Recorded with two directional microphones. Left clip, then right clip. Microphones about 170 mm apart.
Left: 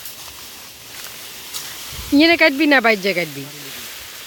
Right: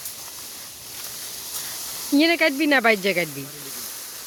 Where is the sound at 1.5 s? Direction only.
5° left (ahead or behind).